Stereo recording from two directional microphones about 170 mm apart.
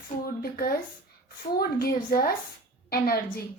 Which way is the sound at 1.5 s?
60° left (ahead or behind).